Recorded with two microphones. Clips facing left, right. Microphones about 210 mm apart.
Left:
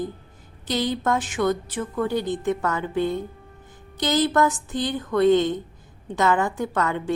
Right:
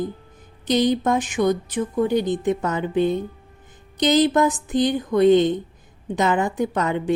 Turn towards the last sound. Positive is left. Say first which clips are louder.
# right 3 dB
turn(degrees=-20)  # may be behind; listen again after turning